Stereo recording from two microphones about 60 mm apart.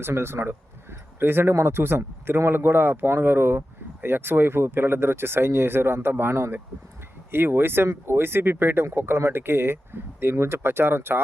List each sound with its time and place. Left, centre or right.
0.0 s speech: right